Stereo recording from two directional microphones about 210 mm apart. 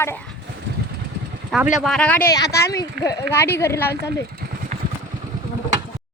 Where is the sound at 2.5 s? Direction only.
50° left (ahead or behind).